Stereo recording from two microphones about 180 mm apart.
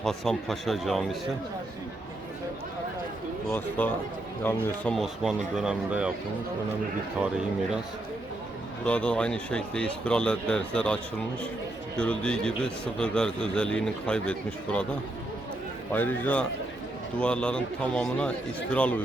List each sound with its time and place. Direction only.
0.0 s a man's voice: centre (ahead or behind)
3.5 s speech: 10° left (ahead or behind); by 6.1 s 5° right (ahead or behind)
7.2 s a man's voice: 5° right (ahead or behind)
8.8 s a man's voice: 5° left (ahead or behind)
11.9 s a man's voice: 5° left (ahead or behind)
15.9 s a man's voice: 10° left (ahead or behind)